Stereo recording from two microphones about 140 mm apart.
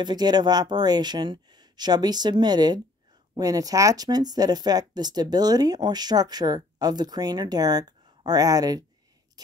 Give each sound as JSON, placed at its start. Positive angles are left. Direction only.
{"t": 0.0, "sound": "speech", "side_deg": -30}